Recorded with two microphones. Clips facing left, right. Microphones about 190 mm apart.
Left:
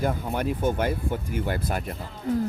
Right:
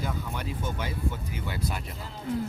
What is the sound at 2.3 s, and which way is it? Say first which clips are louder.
Speech: left 5 dB; 40° left (ahead or behind).